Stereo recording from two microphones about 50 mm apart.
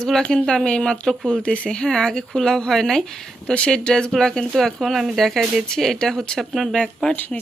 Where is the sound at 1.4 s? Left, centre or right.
Left.